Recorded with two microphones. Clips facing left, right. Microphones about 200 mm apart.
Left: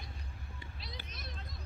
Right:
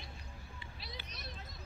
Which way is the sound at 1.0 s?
Centre (ahead or behind).